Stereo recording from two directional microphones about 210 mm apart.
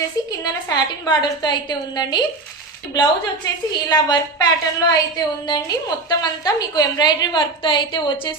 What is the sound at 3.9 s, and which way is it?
A woman's voice, 20° left (ahead or behind).